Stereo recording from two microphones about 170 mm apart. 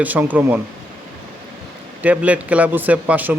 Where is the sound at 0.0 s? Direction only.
10° right (ahead or behind).